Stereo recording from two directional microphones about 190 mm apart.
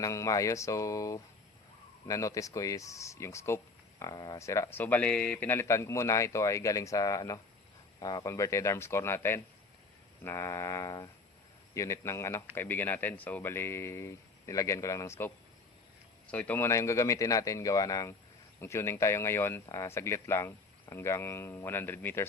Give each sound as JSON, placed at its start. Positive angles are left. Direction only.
{"t": 0.0, "sound": "speech", "side_deg": 15}